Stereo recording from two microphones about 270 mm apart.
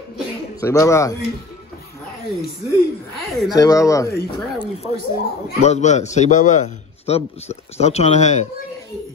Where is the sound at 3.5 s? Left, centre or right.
Centre.